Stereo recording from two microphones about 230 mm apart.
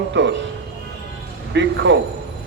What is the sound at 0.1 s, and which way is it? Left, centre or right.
Speech, right.